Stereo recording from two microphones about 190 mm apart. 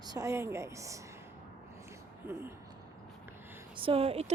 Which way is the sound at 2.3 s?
10° right (ahead or behind).